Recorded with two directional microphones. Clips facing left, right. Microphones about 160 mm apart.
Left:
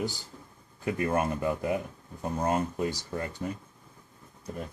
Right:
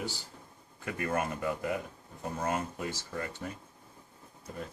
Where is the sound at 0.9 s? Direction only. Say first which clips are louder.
Left 4 dB; 25° left (ahead or behind).